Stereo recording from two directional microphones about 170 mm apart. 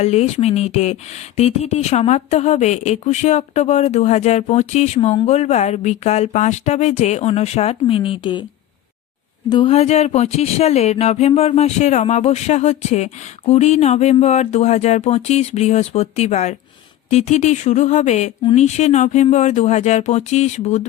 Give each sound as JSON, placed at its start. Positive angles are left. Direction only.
{"t": 0.0, "sound": "speech", "side_deg": 40}
{"t": 9.5, "sound": "speech", "side_deg": 30}